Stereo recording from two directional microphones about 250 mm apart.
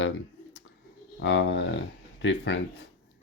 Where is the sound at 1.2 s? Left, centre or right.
Left.